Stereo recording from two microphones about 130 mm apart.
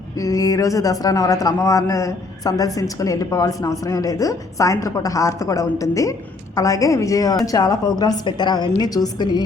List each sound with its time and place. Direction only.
0.2 s speech: 25° left (ahead or behind)